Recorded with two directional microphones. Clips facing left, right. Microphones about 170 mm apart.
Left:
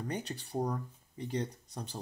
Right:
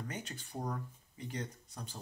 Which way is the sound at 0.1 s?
35° left (ahead or behind).